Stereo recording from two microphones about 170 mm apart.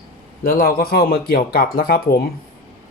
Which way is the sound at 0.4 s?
60° left (ahead or behind).